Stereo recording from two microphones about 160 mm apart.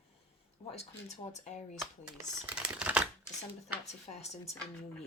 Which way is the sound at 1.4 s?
50° left (ahead or behind).